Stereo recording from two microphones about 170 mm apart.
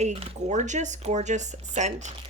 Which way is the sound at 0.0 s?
40° right (ahead or behind).